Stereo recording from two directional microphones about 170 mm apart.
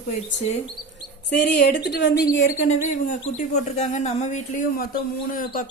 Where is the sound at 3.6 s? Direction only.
45° left (ahead or behind).